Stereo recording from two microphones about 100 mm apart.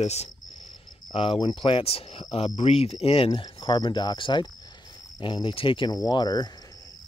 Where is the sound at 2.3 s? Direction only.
85° left.